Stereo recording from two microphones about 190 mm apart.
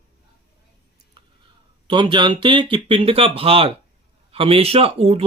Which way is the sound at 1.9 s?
25° right (ahead or behind).